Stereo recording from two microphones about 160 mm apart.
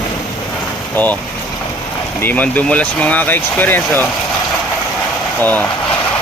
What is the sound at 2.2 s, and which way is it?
Speech, 10° left (ahead or behind).